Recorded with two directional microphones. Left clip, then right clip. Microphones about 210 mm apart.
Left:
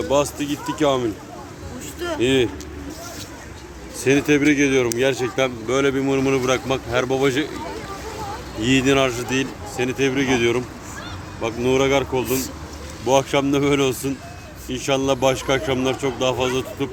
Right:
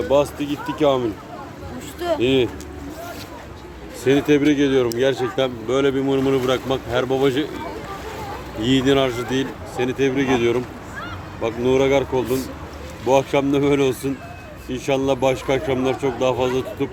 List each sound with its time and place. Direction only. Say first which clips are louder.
0.1 s speech: right 2 dB; centre (ahead or behind)
0.5 s speech: even; 40° left (ahead or behind)
0.8 s speech: right 2 dB; centre (ahead or behind)
2.0 s a sound: right 4 dB; 45° right (ahead or behind)
2.2 s speech: left 1 dB; centre (ahead or behind)
4.0 s a man's voice: even; 10° left (ahead or behind)
8.6 s a man's voice: even; 5° left (ahead or behind)